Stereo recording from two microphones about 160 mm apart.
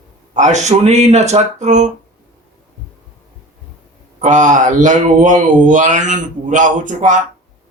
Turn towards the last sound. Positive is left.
turn(degrees=-50)  # may be behind; listen again after turning